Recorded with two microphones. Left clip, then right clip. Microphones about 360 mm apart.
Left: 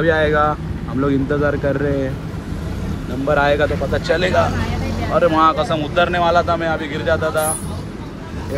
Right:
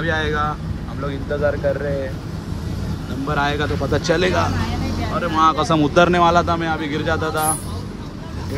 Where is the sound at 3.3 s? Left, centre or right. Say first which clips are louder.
Left 6 dB; centre.